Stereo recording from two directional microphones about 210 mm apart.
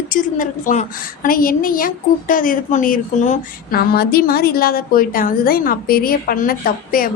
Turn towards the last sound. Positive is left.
turn(degrees=45)  # may be behind; listen again after turning